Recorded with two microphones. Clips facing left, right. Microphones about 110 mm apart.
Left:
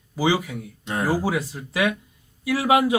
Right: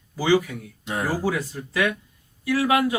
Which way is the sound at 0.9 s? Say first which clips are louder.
Left 2 dB; centre (ahead or behind).